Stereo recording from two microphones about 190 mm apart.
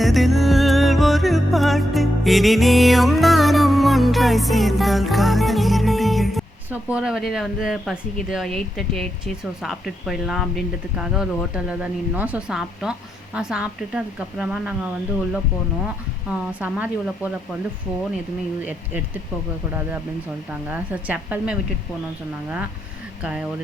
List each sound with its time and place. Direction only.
0.0 s music: centre (ahead or behind)
16.3 s speech: 10° right (ahead or behind)
20.5 s speech: 10° right (ahead or behind)